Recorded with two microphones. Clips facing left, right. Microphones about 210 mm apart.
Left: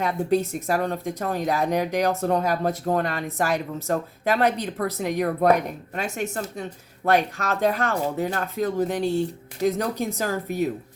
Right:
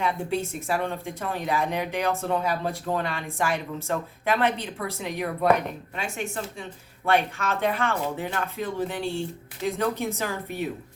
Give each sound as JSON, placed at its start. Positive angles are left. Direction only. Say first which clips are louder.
{"t": 0.0, "sound": "a woman's voice", "louder": "left 5 dB", "side_deg": 40}